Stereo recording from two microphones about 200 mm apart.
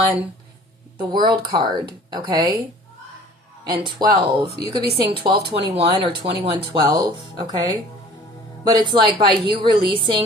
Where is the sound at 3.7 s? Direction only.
20° right (ahead or behind).